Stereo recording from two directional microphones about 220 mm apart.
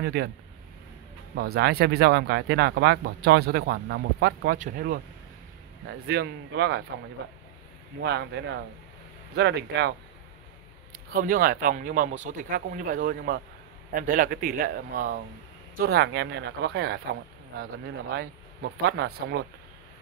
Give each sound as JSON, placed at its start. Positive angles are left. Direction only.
{"t": 0.0, "sound": "speech", "side_deg": -45}
{"t": 1.3, "sound": "speech", "side_deg": -45}
{"t": 6.0, "sound": "speech", "side_deg": -50}
{"t": 8.0, "sound": "speech", "side_deg": -50}
{"t": 11.1, "sound": "speech", "side_deg": -40}
{"t": 18.1, "sound": "speech", "side_deg": -50}